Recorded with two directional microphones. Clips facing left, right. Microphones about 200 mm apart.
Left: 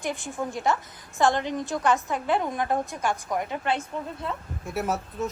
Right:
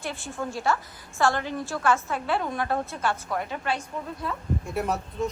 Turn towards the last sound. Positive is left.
turn(degrees=5)  # may be behind; listen again after turning